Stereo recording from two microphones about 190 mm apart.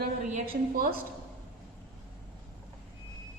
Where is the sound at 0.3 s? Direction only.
50° right (ahead or behind).